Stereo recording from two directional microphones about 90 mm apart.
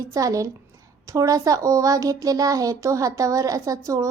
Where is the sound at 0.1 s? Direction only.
40° right (ahead or behind).